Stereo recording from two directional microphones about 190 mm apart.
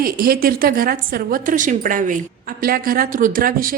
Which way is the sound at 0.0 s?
50° right (ahead or behind).